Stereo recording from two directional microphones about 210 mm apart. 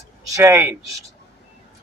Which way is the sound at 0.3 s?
15° right (ahead or behind).